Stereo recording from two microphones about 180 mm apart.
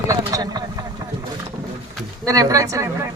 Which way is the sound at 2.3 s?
20° right (ahead or behind).